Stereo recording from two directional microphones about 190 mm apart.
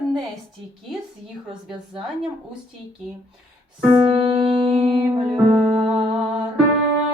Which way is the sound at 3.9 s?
25° right (ahead or behind).